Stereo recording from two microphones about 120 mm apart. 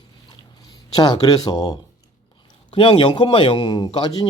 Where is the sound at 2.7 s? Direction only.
45° left (ahead or behind).